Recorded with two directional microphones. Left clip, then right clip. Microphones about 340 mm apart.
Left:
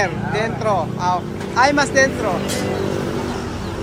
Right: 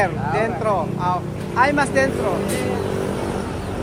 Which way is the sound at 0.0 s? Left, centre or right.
Centre.